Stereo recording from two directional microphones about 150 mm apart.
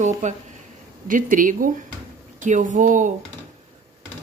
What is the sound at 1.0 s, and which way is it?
Speech, 65° right (ahead or behind).